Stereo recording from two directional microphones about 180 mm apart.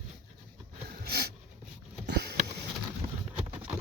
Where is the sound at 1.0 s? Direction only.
65° right (ahead or behind).